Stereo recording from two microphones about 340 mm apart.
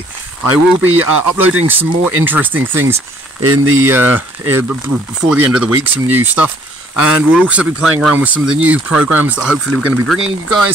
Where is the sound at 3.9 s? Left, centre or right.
Centre.